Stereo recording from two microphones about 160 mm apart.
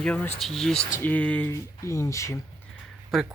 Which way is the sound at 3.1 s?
Centre (ahead or behind).